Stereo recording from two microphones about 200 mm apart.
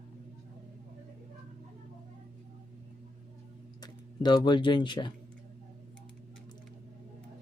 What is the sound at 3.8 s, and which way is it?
Speech, 20° left (ahead or behind).